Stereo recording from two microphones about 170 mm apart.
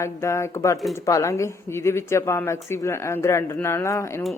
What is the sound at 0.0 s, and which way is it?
A woman's voice, 15° left (ahead or behind).